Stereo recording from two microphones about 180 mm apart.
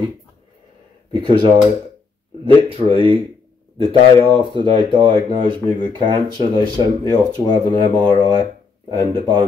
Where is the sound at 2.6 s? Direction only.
30° right (ahead or behind).